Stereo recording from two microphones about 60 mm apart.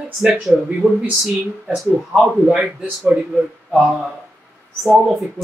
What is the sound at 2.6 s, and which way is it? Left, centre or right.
Speech, centre.